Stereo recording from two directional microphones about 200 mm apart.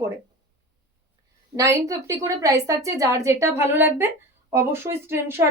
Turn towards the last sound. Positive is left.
turn(degrees=-10)  # may be behind; listen again after turning